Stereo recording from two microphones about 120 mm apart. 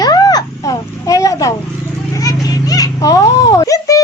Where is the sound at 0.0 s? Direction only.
35° left (ahead or behind).